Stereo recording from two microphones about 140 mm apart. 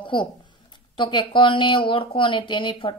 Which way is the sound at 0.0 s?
35° left (ahead or behind).